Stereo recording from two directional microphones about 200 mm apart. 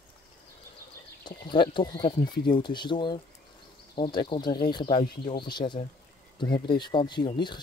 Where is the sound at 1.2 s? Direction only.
20° left (ahead or behind).